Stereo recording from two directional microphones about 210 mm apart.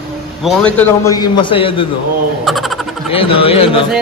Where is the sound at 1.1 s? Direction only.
20° left (ahead or behind).